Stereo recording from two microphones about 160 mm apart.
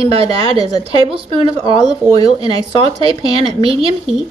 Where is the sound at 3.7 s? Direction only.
Centre (ahead or behind).